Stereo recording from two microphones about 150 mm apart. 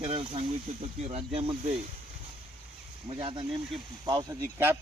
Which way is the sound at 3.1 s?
35° right (ahead or behind).